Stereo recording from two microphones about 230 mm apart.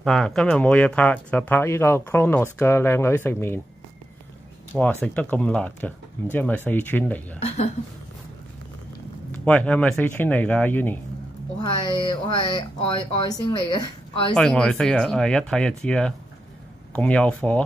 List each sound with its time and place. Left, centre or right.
0.0 s speech: centre
4.7 s speech: centre
7.3 s speech: left
9.3 s speech: centre
12.1 s speech: centre
14.3 s speech: centre